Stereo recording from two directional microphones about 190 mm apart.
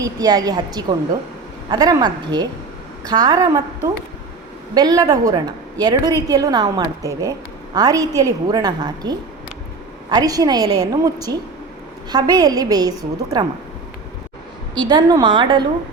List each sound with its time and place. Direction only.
0.0 s a woman's voice: 20° right (ahead or behind)
14.8 s a woman's voice: 20° right (ahead or behind)